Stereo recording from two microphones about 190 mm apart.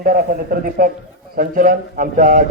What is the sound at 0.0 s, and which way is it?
A man's voice, 50° right (ahead or behind).